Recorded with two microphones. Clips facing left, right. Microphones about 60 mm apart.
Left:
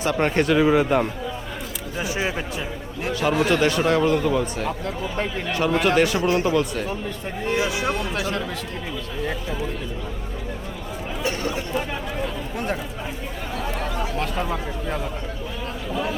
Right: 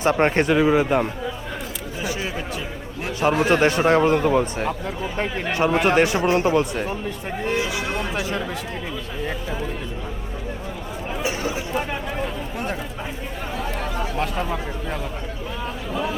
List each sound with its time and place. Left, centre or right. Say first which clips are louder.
0.0 s speech: right 2 dB; right
0.6 s a man's voice: even; centre
3.4 s speech: right 2 dB; right
8.1 s speech: even; centre
11.2 s chatter: even; centre
14.0 s a sound: right 2 dB; centre